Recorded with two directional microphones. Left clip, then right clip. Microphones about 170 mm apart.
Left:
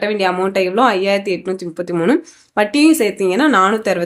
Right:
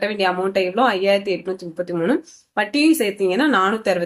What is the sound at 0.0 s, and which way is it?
Speech, 25° left (ahead or behind).